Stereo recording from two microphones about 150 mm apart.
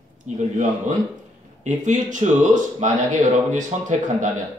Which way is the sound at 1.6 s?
55° right (ahead or behind).